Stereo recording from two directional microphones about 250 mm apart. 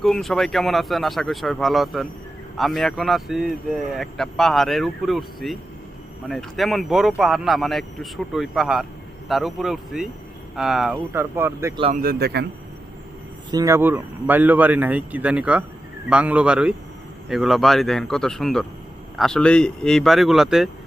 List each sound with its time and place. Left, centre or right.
0.0 s speech: centre
11.8 s speech: right
13.5 s speech: centre